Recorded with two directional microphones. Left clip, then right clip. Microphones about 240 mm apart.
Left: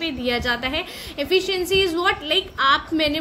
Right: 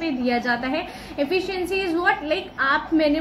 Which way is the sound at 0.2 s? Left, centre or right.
Left.